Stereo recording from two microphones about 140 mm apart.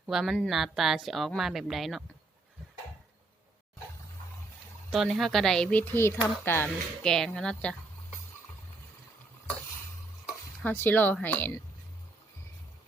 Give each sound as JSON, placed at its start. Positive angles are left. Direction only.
{"t": 0.1, "sound": "speech", "side_deg": -5}
{"t": 4.9, "sound": "speech", "side_deg": 0}
{"t": 5.8, "sound": "speech", "side_deg": 15}
{"t": 7.0, "sound": "speech", "side_deg": 5}
{"t": 10.6, "sound": "speech", "side_deg": 15}